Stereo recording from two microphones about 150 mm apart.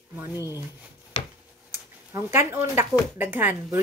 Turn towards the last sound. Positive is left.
turn(degrees=-15)  # may be behind; listen again after turning